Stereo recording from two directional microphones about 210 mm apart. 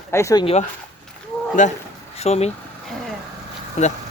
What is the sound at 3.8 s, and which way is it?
Speech, 30° left (ahead or behind).